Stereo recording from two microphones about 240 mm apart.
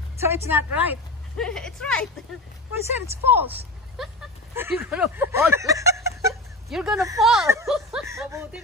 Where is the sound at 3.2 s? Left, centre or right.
Centre.